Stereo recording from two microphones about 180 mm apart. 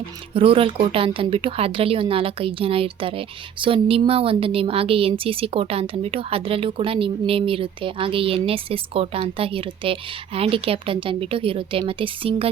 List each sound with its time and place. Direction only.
0.3 s speech: 30° right (ahead or behind)